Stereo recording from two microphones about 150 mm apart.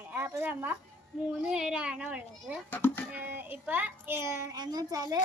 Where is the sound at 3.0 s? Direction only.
15° right (ahead or behind).